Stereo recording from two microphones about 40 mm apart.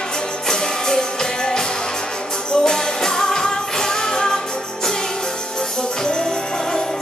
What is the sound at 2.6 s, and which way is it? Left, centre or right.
Music, centre.